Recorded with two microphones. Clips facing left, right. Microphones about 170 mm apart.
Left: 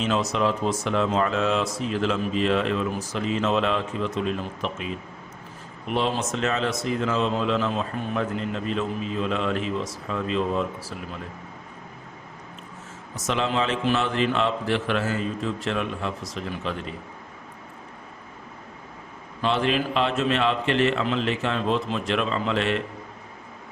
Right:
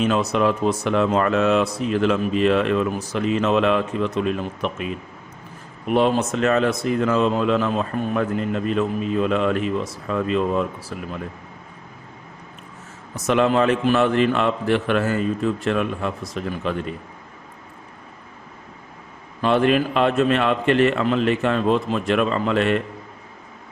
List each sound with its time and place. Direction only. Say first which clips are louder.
0.0 s speech: right 4 dB; 60° right (ahead or behind)
5.9 s speech: right 7 dB; 55° right (ahead or behind)
13.1 s a man's voice: right 7 dB; 60° right (ahead or behind)
19.4 s a man's voice: right 6 dB; 55° right (ahead or behind)